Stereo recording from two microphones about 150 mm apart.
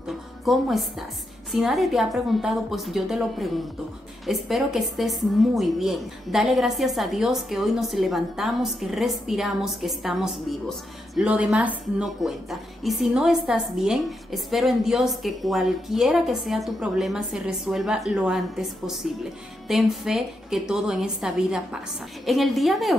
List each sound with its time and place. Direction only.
0.5 s a woman's voice: centre (ahead or behind)